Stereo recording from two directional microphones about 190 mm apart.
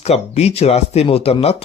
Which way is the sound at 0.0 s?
35° left (ahead or behind).